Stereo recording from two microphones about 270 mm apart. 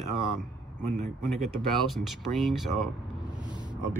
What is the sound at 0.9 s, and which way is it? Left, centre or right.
Speech, right.